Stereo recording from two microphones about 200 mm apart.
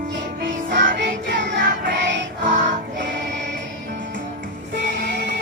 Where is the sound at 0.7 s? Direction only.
60° right (ahead or behind).